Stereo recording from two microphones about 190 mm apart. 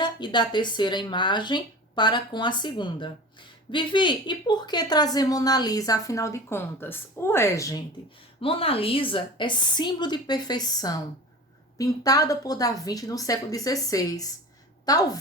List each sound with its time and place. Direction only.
0.0 s speech: 25° left (ahead or behind)
8.4 s speech: 30° left (ahead or behind)